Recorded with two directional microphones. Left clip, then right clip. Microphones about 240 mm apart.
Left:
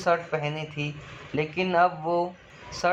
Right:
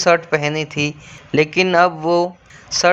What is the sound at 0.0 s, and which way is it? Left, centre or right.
A man's voice, right.